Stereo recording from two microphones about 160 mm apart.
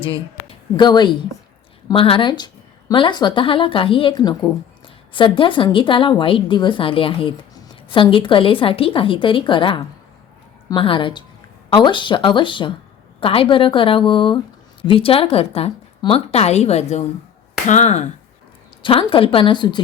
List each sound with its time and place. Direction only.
0.0 s speech: 35° left (ahead or behind)
18.8 s speech: 35° left (ahead or behind)